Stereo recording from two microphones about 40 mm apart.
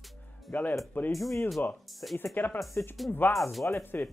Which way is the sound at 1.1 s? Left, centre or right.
Centre.